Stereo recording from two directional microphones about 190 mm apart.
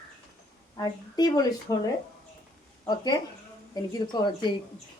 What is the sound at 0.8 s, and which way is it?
Speech, 20° left (ahead or behind).